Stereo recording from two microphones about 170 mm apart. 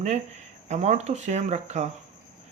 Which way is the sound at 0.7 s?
40° right (ahead or behind).